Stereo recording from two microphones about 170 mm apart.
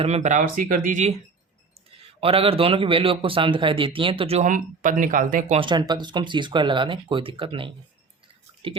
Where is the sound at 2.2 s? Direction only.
35° right (ahead or behind); by 5.5 s 50° right (ahead or behind).